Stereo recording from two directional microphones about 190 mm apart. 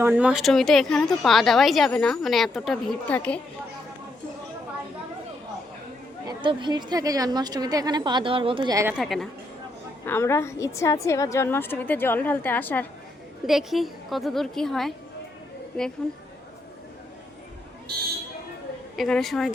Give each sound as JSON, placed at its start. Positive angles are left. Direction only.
{"t": 0.0, "sound": "speech", "side_deg": -10}
{"t": 6.2, "sound": "a woman's voice", "side_deg": -25}
{"t": 9.0, "sound": "speech", "side_deg": 0}
{"t": 10.1, "sound": "a woman's voice", "side_deg": 15}
{"t": 13.5, "sound": "speech", "side_deg": 0}
{"t": 16.0, "sound": "speech", "side_deg": 5}
{"t": 18.9, "sound": "speech", "side_deg": 0}